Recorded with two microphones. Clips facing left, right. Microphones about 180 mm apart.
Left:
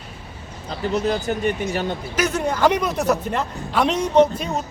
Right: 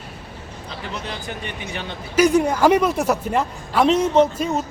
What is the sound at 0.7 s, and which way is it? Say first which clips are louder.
Speech: left 10 dB; 40° left (ahead or behind).